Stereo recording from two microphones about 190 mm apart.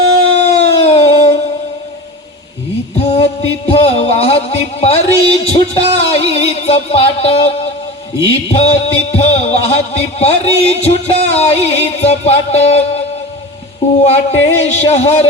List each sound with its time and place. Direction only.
0.3 s music: 35° left (ahead or behind)
3.1 s a man's voice: 30° left (ahead or behind)
14.0 s a man's voice: 35° left (ahead or behind)